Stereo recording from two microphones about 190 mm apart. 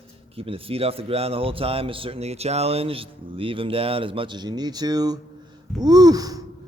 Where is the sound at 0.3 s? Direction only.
30° right (ahead or behind).